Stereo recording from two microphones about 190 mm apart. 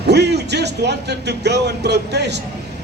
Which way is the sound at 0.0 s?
60° right (ahead or behind).